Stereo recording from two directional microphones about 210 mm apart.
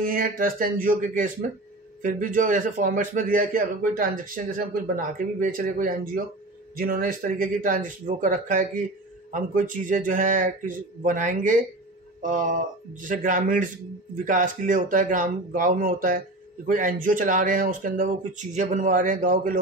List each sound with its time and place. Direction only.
0.0 s a man's voice: 40° right (ahead or behind)